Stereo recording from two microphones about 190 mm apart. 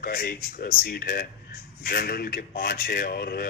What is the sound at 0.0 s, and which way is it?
Speech, 50° left (ahead or behind).